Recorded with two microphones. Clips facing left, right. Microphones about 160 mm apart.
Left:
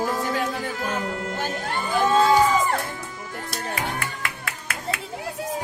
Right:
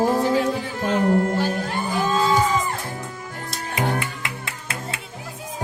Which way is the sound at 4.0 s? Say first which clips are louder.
Right 3 dB; 25° right (ahead or behind).